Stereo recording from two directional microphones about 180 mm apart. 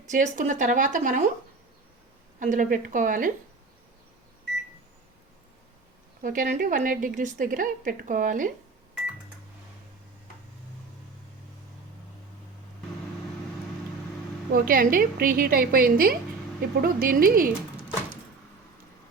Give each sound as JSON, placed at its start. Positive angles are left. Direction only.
{"t": 0.1, "sound": "a woman's voice", "side_deg": -45}
{"t": 2.4, "sound": "a woman's voice", "side_deg": -45}
{"t": 6.2, "sound": "a woman's voice", "side_deg": -45}
{"t": 14.5, "sound": "a woman's voice", "side_deg": -50}